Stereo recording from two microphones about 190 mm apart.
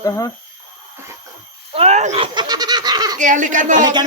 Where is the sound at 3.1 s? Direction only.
40° right (ahead or behind).